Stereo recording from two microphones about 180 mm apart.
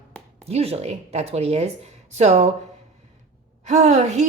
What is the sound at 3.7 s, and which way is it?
Speech, 40° right (ahead or behind).